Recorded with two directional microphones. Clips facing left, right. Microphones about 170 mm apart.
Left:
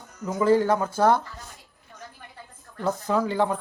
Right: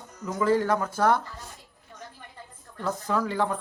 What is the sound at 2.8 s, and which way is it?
Speech, 25° left (ahead or behind).